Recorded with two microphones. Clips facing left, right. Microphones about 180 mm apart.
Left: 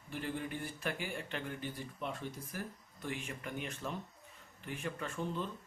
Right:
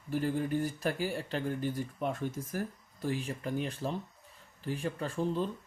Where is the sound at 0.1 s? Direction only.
40° right (ahead or behind).